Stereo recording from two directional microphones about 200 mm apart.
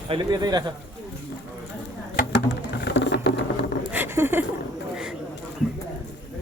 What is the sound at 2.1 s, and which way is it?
Patter, 60° left (ahead or behind).